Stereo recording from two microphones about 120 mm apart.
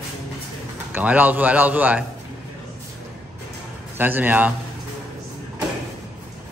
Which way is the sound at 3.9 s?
15° right (ahead or behind).